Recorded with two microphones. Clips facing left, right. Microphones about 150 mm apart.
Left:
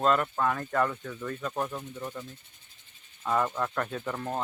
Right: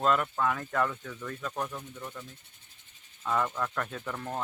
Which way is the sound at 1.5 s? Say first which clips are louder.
Left 3 dB; 20° left (ahead or behind).